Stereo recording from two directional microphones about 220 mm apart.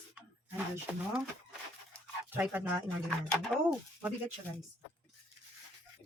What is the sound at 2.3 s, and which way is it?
Speech, 10° right (ahead or behind).